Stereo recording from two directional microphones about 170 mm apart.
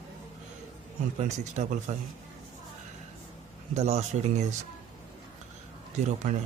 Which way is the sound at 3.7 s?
40° right (ahead or behind).